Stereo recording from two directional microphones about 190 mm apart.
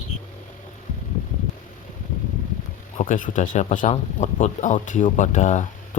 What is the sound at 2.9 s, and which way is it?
Speech, 45° left (ahead or behind).